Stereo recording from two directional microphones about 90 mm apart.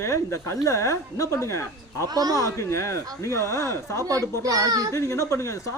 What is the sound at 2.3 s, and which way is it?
A woman's voice, 35° left (ahead or behind).